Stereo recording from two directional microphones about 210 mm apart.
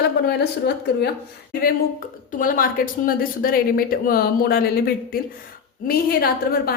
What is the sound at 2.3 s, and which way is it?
A woman's voice, 40° left (ahead or behind).